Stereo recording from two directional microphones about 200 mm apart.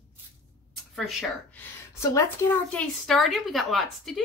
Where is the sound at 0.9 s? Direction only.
Centre (ahead or behind).